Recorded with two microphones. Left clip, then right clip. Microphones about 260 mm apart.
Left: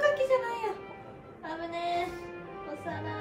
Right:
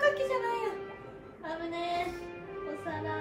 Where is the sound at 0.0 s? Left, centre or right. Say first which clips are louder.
Left 2 dB; centre.